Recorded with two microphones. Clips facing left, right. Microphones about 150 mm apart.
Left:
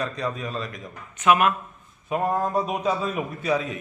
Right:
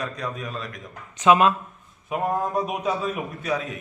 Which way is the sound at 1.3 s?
25° right (ahead or behind).